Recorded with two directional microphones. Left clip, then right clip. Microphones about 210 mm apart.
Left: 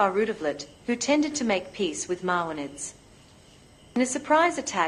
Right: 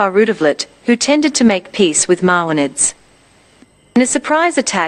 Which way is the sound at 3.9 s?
50° right (ahead or behind).